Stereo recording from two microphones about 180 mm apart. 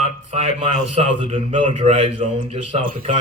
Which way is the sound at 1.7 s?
40° right (ahead or behind).